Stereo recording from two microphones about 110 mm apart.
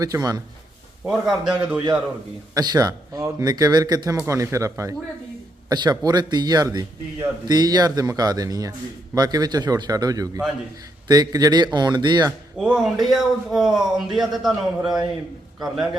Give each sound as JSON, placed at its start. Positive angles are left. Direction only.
{"t": 0.0, "sound": "a man's voice", "side_deg": -35}
{"t": 1.0, "sound": "a man's voice", "side_deg": -5}
{"t": 2.6, "sound": "a man's voice", "side_deg": -35}
{"t": 12.5, "sound": "speech", "side_deg": -5}